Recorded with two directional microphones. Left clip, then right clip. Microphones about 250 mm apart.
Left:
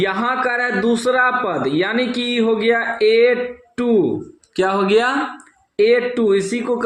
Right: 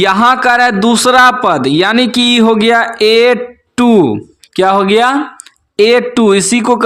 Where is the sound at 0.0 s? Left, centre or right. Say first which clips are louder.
Right 10 dB; right.